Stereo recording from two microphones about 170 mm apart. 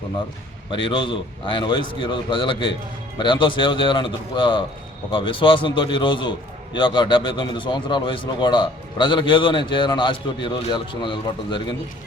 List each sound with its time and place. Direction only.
0.9 s a man's voice: 30° left (ahead or behind)